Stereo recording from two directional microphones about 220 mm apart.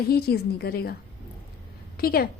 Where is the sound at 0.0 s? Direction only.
45° left (ahead or behind).